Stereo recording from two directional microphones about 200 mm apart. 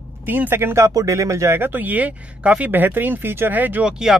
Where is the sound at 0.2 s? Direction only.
10° right (ahead or behind).